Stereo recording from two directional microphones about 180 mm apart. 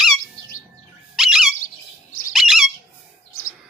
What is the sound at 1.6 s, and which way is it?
Bird, 45° left (ahead or behind).